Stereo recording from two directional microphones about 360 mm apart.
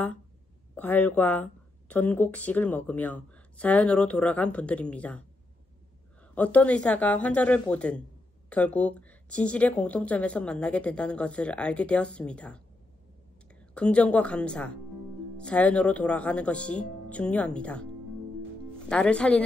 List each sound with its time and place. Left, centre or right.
0.7 s speech: centre
6.3 s speech: centre
13.7 s speech: centre
18.9 s speech: centre